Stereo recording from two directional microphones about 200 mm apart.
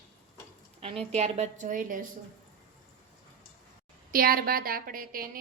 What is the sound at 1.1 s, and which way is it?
Speech, 35° right (ahead or behind).